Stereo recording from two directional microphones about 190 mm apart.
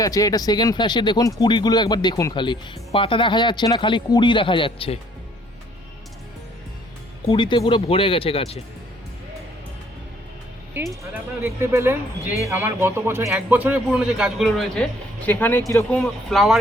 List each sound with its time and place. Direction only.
0.0 s speech: 20° left (ahead or behind)
7.3 s speech: 25° left (ahead or behind)
10.8 s speech: 10° right (ahead or behind)